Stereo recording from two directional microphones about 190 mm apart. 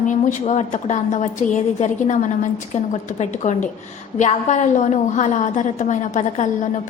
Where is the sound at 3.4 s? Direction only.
40° left (ahead or behind).